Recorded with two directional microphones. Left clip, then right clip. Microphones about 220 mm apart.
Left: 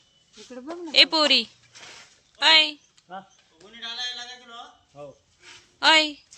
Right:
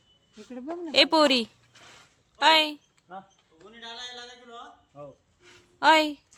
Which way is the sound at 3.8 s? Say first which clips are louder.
Left 8 dB; 40° left (ahead or behind).